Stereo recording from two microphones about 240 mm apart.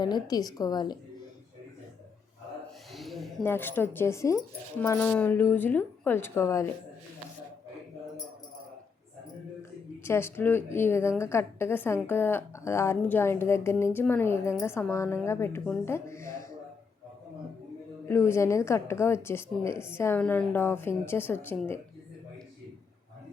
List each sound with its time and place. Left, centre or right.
0.0 s speech: centre
2.9 s speech: centre
10.0 s speech: centre
18.1 s speech: centre